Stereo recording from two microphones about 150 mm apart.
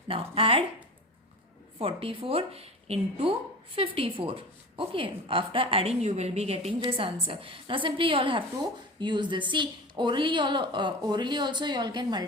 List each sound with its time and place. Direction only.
0.1 s a woman's voice: 40° right (ahead or behind)
1.8 s a woman's voice: 35° right (ahead or behind)